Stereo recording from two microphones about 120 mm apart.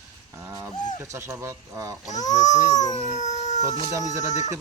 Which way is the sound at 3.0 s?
75° left (ahead or behind).